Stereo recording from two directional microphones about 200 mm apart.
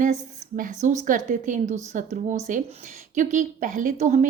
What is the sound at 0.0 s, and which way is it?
A woman's voice, 40° right (ahead or behind).